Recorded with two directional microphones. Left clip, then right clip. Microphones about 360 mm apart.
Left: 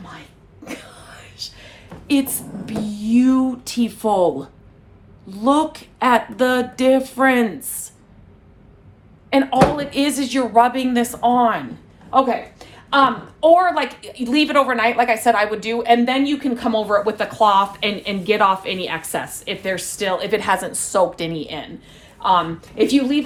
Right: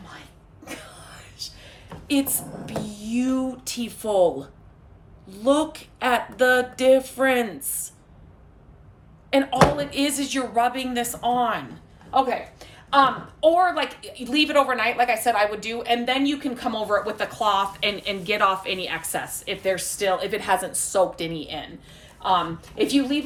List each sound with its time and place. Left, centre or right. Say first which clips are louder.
1.4 s a sound: left 4 dB; centre
5.3 s a woman's voice: left 4 dB; centre
9.3 s a woman's voice: left 3 dB; centre